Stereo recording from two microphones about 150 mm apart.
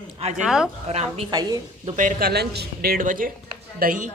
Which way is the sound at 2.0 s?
75° right (ahead or behind).